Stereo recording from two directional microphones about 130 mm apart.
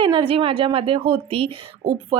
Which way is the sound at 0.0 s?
40° right (ahead or behind).